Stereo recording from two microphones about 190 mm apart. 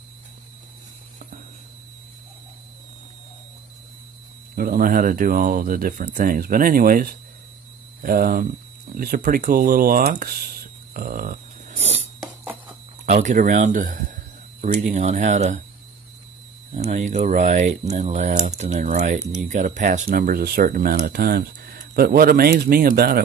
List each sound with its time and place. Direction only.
4.6 s speech: 50° right (ahead or behind)
10.9 s a sound: 50° right (ahead or behind)
12.2 s music: 5° right (ahead or behind)
13.0 s speech: 40° right (ahead or behind)
16.7 s speech: 35° right (ahead or behind); by 23.2 s 55° right (ahead or behind)